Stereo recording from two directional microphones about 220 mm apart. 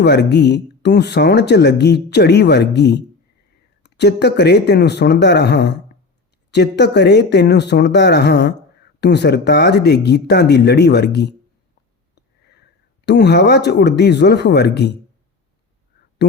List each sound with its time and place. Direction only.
0.0 s speech: 50° left (ahead or behind)
12.1 s a sound: 50° left (ahead or behind)
13.1 s speech: 50° left (ahead or behind)